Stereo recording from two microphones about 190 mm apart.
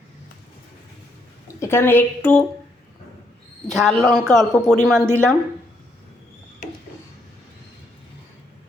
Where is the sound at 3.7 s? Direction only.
Centre (ahead or behind).